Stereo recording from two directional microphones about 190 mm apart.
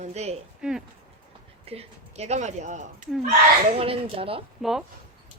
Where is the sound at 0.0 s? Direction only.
35° right (ahead or behind).